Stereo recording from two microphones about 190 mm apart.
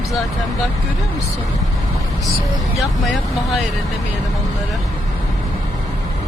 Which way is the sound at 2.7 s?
Centre (ahead or behind).